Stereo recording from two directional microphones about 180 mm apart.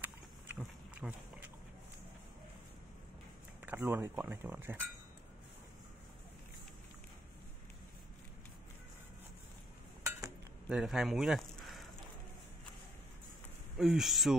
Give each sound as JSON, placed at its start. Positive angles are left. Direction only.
{"t": 0.0, "sound": "a sound", "side_deg": -10}
{"t": 3.6, "sound": "speech", "side_deg": -10}
{"t": 10.7, "sound": "speech", "side_deg": -5}
{"t": 13.7, "sound": "speech", "side_deg": 0}